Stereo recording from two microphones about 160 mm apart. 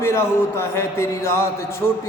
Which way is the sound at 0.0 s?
15° left (ahead or behind).